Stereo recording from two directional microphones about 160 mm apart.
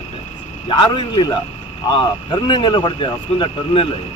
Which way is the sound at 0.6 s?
30° left (ahead or behind).